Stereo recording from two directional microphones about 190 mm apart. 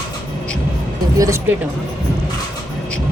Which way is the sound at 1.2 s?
15° right (ahead or behind).